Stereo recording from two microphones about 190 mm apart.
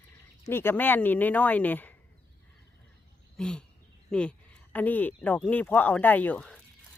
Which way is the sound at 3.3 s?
5° left (ahead or behind).